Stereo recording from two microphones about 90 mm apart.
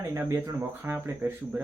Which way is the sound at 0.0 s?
30° right (ahead or behind).